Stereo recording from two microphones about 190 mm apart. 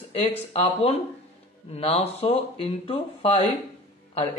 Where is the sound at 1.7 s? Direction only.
30° left (ahead or behind).